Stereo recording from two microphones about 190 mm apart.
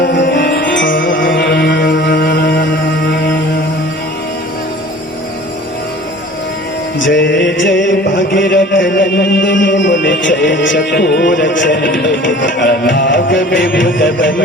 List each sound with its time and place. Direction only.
0.0 s music: 65° left (ahead or behind); by 2.6 s 50° left (ahead or behind)
7.0 s music: 70° left (ahead or behind); by 13.6 s 45° left (ahead or behind)
13.6 s music: 75° left (ahead or behind)